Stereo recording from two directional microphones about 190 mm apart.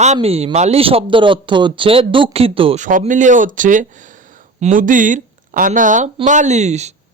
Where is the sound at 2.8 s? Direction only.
45° right (ahead or behind).